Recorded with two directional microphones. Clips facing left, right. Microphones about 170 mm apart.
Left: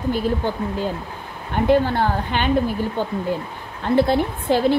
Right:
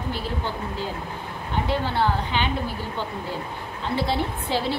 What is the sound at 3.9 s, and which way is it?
Speech, 50° left (ahead or behind).